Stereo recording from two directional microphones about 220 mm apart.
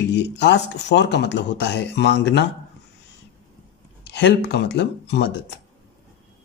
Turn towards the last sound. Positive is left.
turn(degrees=50)  # may be behind; listen again after turning